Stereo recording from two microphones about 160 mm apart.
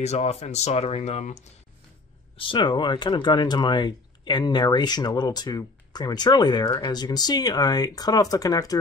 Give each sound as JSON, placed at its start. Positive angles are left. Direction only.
{"t": 0.0, "sound": "speech", "side_deg": 45}
{"t": 2.3, "sound": "speech", "side_deg": 30}